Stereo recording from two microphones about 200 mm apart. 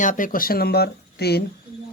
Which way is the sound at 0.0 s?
40° left (ahead or behind).